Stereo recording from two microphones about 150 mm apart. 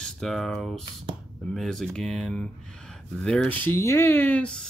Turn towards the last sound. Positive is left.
turn(degrees=10)  # may be behind; listen again after turning